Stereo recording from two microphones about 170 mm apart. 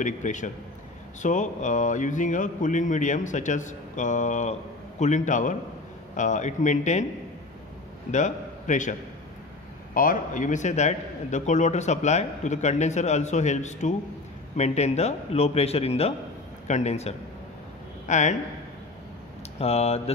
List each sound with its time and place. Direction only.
0.0 s a man's voice: 45° left (ahead or behind)
8.1 s a man's voice: 45° left (ahead or behind)
9.9 s a man's voice: 50° left (ahead or behind)
19.6 s a man's voice: 35° left (ahead or behind)